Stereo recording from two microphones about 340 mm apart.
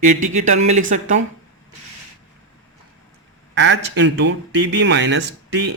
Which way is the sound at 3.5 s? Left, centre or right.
Right.